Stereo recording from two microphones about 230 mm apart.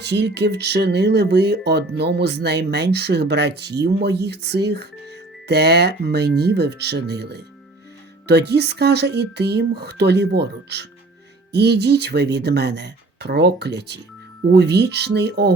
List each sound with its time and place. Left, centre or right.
0.0 s speech: right